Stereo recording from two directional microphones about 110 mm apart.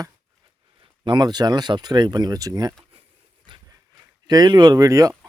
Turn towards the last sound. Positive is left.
turn(degrees=-30)  # may be behind; listen again after turning